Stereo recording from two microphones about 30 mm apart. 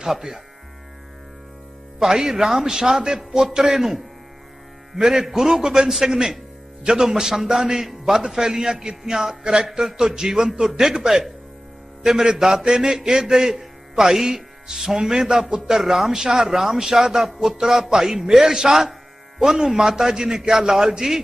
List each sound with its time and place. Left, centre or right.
0.0 s a man's voice: centre
2.0 s a man's voice: centre
4.9 s a man's voice: centre
9.4 s a man's voice: right
10.0 s a man's voice: centre
10.7 s a man's voice: centre